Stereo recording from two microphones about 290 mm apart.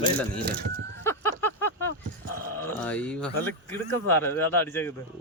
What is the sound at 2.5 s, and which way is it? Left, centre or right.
Speech, centre.